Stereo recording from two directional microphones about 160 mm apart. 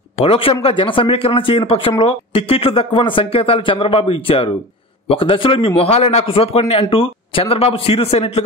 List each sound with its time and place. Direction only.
0.2 s speech: 35° left (ahead or behind)